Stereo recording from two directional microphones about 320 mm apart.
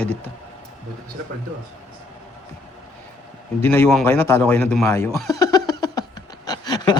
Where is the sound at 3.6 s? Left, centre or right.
Centre.